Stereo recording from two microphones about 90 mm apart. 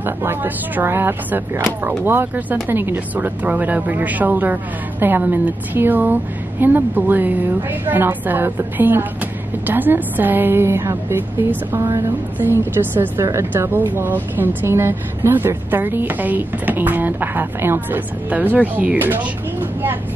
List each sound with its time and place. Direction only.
0.0 s speech: 25° right (ahead or behind)
13.2 s speech: 35° right (ahead or behind)
13.5 s speech: 20° right (ahead or behind)